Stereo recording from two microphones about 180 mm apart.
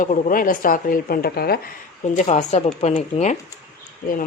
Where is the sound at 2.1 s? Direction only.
40° left (ahead or behind).